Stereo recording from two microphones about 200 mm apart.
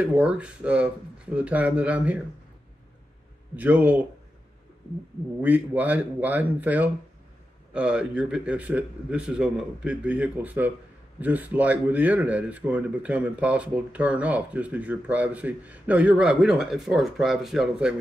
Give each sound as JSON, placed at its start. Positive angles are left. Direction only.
{"t": 0.0, "sound": "speech", "side_deg": -5}
{"t": 3.5, "sound": "speech", "side_deg": -5}
{"t": 5.4, "sound": "a man's voice", "side_deg": -10}